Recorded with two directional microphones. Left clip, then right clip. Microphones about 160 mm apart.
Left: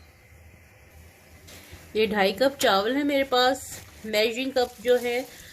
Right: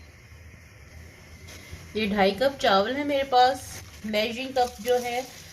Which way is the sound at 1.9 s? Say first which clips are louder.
Left 1 dB; 55° left (ahead or behind).